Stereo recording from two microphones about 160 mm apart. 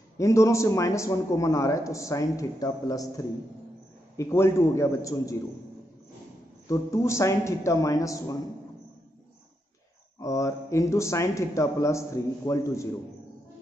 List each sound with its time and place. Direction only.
0.2 s a man's voice: 20° left (ahead or behind)
6.7 s a man's voice: 20° left (ahead or behind)
10.2 s a man's voice: 20° left (ahead or behind)